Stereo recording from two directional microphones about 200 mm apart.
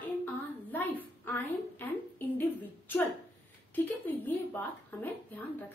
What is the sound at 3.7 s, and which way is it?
A woman's voice, 10° left (ahead or behind).